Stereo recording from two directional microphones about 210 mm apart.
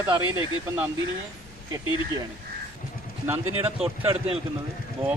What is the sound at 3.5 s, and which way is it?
Speech, 25° right (ahead or behind).